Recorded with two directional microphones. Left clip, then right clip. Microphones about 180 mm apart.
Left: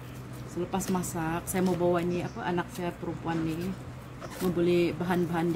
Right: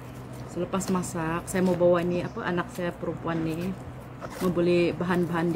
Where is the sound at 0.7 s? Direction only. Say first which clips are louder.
Right 2 dB; 15° left (ahead or behind).